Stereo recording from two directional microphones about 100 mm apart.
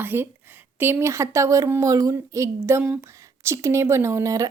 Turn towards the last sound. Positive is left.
turn(degrees=-35)  # may be behind; listen again after turning